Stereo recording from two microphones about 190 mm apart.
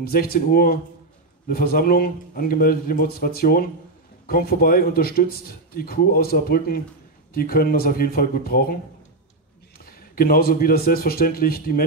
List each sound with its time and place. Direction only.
0.0 s speech: 55° left (ahead or behind)
10.1 s speech: 50° left (ahead or behind)